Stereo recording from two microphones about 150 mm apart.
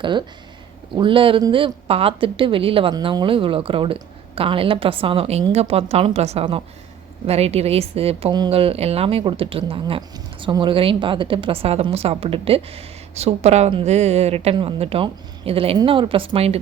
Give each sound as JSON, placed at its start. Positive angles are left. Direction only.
{"t": 0.0, "sound": "speech", "side_deg": -30}